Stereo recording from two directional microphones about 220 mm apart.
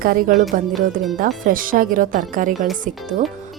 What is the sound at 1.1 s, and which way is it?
Speech, 40° right (ahead or behind).